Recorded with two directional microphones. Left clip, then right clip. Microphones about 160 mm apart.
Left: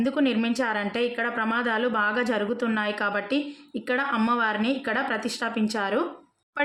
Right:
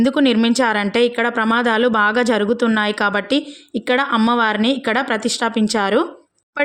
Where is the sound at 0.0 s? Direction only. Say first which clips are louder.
Right 9 dB; 55° right (ahead or behind).